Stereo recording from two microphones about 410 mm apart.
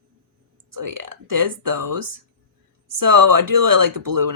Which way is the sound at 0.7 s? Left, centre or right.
Right.